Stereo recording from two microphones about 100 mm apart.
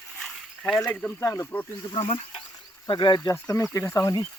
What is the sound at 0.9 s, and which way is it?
Speech, 15° left (ahead or behind).